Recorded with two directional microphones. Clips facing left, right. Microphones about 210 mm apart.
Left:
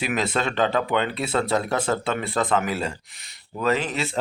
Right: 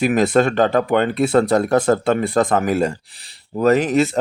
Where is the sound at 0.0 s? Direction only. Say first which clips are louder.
Right 9 dB; 45° right (ahead or behind).